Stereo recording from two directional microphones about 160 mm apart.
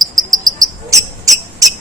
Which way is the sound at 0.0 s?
25° right (ahead or behind).